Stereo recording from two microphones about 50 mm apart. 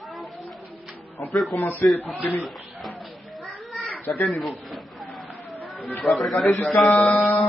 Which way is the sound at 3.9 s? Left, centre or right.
Left.